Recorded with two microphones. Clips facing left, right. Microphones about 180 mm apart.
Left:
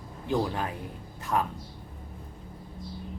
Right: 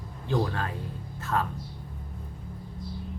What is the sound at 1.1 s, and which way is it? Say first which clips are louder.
Music: left 1 dB; 15° left (ahead or behind).